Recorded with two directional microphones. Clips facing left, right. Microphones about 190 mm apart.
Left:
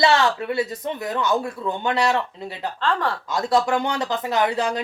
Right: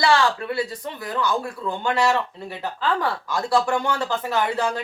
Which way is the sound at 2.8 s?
5° right (ahead or behind).